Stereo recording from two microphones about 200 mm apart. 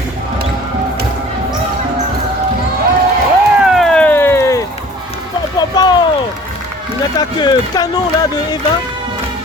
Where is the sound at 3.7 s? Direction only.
Centre (ahead or behind).